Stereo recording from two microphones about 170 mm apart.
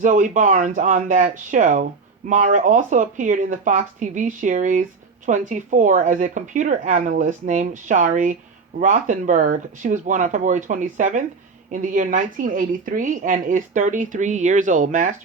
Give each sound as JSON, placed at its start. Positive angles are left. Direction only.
{"t": 0.0, "sound": "speech", "side_deg": -50}